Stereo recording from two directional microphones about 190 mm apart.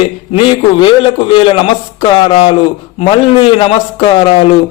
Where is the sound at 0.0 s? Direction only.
25° left (ahead or behind).